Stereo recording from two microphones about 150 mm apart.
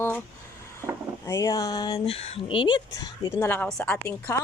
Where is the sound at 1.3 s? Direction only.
25° left (ahead or behind).